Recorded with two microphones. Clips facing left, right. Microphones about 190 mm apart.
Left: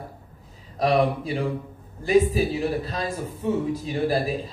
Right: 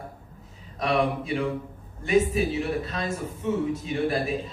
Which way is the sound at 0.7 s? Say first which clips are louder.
Left 3 dB; 35° left (ahead or behind).